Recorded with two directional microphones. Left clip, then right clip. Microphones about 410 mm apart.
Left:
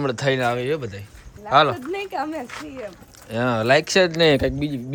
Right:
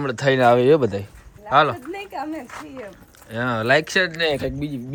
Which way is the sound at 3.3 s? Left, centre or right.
Centre.